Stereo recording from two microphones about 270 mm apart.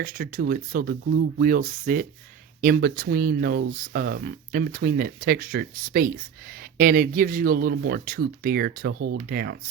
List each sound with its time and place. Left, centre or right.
0.0 s speech: right